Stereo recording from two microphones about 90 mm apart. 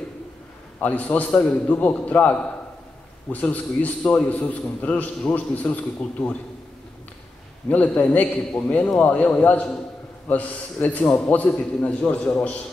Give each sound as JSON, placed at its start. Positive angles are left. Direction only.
{"t": 0.7, "sound": "a man's voice", "side_deg": 20}
{"t": 7.7, "sound": "a man's voice", "side_deg": 15}